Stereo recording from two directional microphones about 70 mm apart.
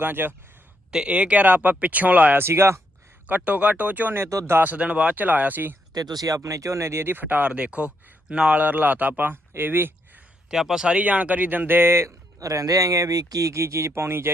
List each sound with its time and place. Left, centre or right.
0.0 s speech: right
0.9 s speech: centre
2.4 s speech: right
3.2 s speech: right
4.3 s speech: right
4.5 s speech: right
5.9 s speech: right
10.5 s speech: centre; by 12.1 s right
12.4 s speech: right